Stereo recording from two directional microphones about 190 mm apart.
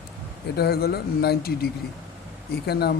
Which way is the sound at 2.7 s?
55° left (ahead or behind).